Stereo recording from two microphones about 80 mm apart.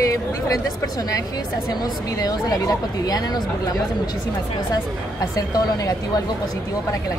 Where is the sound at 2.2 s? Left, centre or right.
Left.